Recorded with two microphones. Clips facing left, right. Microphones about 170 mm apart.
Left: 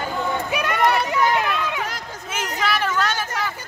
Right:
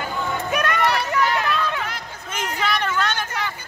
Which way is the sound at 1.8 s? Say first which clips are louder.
Left 1 dB; 40° left (ahead or behind).